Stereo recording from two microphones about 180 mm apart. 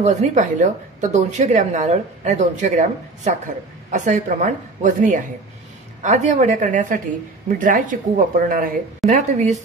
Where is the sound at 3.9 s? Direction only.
40° right (ahead or behind).